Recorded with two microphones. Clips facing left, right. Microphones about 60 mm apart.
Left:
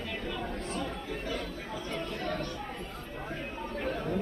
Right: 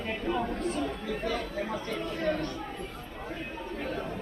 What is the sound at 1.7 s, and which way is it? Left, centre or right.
Chatter, right.